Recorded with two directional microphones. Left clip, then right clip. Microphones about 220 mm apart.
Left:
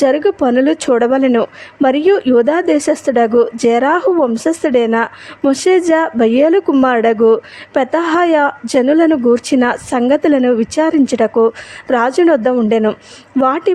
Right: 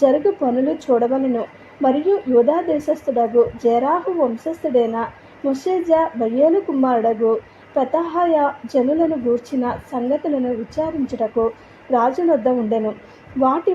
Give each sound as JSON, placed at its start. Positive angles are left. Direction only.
{"t": 0.0, "sound": "a woman's voice", "side_deg": 40}